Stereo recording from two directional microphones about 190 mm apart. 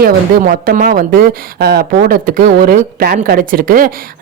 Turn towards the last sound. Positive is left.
turn(degrees=-50)  # may be behind; listen again after turning